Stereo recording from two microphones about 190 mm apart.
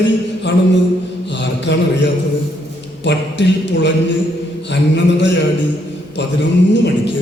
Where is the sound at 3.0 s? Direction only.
70° left (ahead or behind).